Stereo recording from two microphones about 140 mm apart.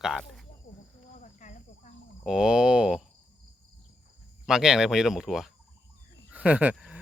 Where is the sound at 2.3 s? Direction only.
5° right (ahead or behind).